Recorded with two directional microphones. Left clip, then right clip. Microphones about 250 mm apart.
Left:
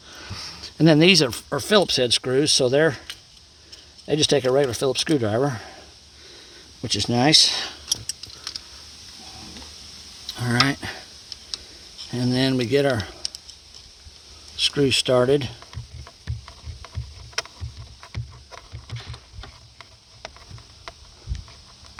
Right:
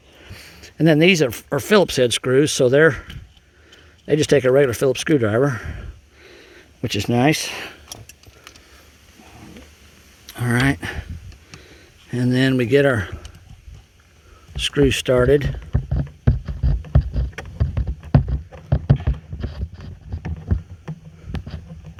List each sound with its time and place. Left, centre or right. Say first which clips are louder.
0.1 s speech: left 6 dB; centre
6.8 s speech: right 2 dB; centre
10.2 s a sound: right 1 dB; right
12.1 s speech: right 3 dB; centre
14.6 s speech: right 2 dB; centre